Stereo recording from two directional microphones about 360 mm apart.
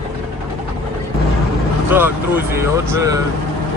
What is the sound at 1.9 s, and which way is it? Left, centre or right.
Speech, centre.